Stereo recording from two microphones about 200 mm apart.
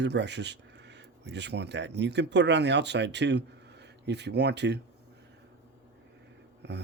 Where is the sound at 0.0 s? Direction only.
60° right (ahead or behind).